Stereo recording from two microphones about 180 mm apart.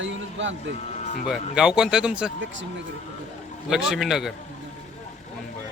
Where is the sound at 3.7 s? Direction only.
5° right (ahead or behind).